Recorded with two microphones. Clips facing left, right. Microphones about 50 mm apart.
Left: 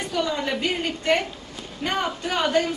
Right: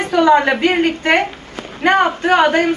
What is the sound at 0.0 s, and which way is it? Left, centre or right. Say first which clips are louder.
A woman's voice: right 13 dB; right.